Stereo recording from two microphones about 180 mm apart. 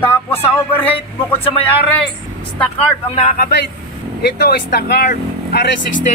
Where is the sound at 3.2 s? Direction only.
50° left (ahead or behind).